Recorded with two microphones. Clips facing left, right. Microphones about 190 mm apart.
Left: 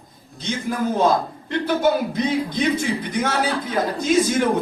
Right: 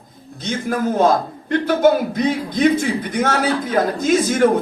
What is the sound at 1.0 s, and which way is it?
Speech, 50° right (ahead or behind).